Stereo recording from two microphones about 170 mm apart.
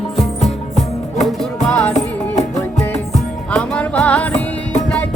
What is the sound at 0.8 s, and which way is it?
Music, 40° left (ahead or behind).